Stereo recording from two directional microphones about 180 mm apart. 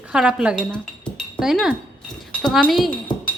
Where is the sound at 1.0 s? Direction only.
Centre (ahead or behind).